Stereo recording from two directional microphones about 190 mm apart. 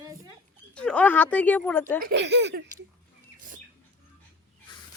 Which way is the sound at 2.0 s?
60° right (ahead or behind).